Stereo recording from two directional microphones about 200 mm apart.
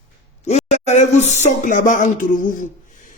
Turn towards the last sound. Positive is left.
turn(degrees=40)  # may be behind; listen again after turning